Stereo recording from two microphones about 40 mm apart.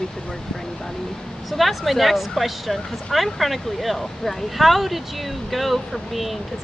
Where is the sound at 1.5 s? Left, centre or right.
Centre.